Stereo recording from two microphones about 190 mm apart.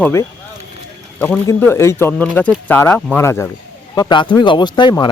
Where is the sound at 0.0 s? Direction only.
15° left (ahead or behind).